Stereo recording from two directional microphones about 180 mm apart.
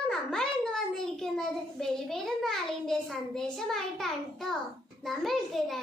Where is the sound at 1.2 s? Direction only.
Centre (ahead or behind).